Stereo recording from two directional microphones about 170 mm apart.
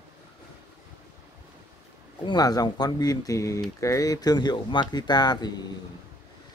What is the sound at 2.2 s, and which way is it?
Speech, 25° left (ahead or behind).